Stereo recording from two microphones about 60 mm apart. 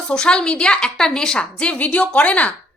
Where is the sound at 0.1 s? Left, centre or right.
Centre.